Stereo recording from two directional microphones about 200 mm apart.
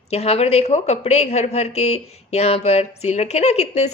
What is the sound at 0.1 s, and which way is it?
A woman's voice, 30° left (ahead or behind).